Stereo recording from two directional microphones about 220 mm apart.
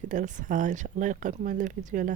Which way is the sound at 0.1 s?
35° right (ahead or behind).